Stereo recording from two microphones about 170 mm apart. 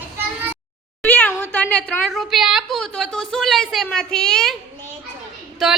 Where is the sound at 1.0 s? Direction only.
10° left (ahead or behind).